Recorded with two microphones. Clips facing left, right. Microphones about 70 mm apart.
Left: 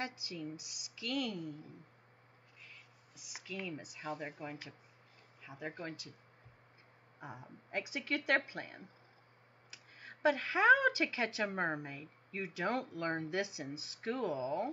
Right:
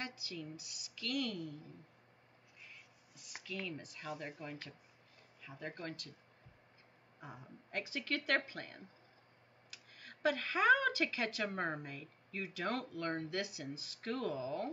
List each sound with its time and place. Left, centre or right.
0.0 s speech: left
3.2 s speech: centre
7.2 s speech: centre